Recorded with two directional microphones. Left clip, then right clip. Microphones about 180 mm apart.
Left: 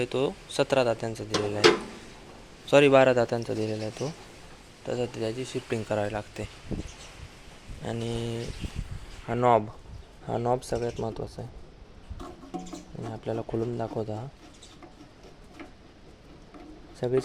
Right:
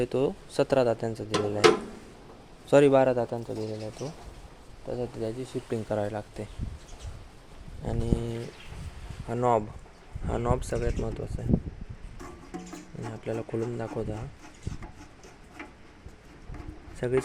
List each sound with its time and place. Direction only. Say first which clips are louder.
0.0 s speech: right 1 dB; 30° right (ahead or behind)
2.6 s a man's voice: even; 25° right (ahead or behind)
2.9 s a man's voice: left 3 dB; centre (ahead or behind)
3.2 s speech: left 4 dB; 15° left (ahead or behind)
4.9 s speech: left 3 dB; centre (ahead or behind)
7.8 s a man's voice: even; 10° right (ahead or behind)
13.0 s a man's voice: left 1 dB; 5° left (ahead or behind)
17.0 s a man's voice: left 1 dB; 5° right (ahead or behind)